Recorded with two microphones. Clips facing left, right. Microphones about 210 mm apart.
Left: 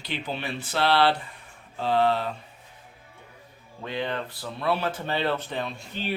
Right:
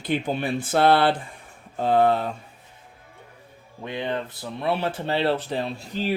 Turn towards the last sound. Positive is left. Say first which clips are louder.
# right 5 dB
turn(degrees=-40)  # may be behind; listen again after turning